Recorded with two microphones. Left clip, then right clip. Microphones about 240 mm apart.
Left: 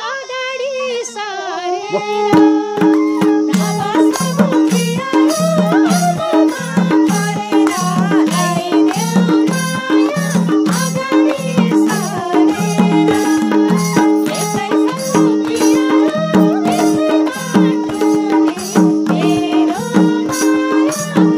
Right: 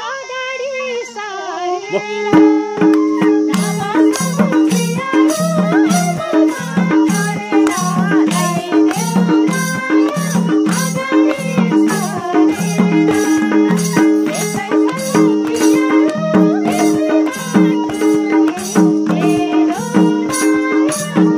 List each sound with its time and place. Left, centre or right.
2.3 s music: left
15.2 s music: left